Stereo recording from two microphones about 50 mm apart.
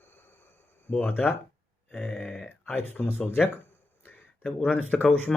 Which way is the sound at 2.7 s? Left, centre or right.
Left.